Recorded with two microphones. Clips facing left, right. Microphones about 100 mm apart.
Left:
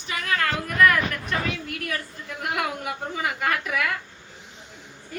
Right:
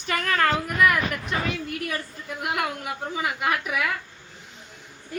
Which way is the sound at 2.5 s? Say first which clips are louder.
Left 2 dB; centre (ahead or behind).